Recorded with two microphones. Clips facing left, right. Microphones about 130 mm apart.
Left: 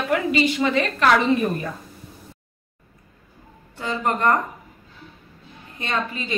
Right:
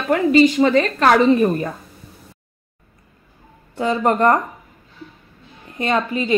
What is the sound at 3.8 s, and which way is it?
Speech, 40° right (ahead or behind).